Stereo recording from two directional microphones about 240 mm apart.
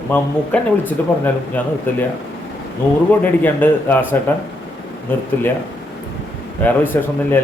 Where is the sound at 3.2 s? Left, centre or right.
Centre.